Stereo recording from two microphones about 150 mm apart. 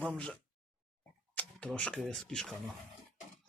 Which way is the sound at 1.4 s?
10° left (ahead or behind).